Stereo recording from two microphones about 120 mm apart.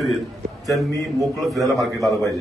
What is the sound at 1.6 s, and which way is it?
Speech, 30° right (ahead or behind).